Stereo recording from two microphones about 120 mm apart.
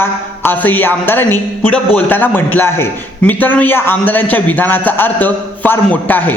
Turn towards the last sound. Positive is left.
turn(degrees=15)  # may be behind; listen again after turning